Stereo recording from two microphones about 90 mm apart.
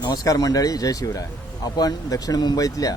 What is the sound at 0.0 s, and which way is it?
A man's voice, 45° left (ahead or behind).